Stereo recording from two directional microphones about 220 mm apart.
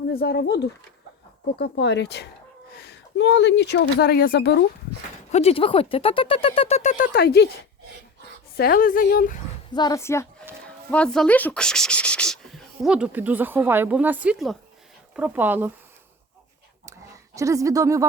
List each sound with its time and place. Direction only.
0.1 s speech: 45° left (ahead or behind)
5.3 s speech: 30° left (ahead or behind); by 7.4 s 45° left (ahead or behind)
8.5 s speech: 45° left (ahead or behind)
9.7 s a woman's voice: 15° left (ahead or behind); by 15.7 s 10° right (ahead or behind)
17.3 s speech: 15° right (ahead or behind)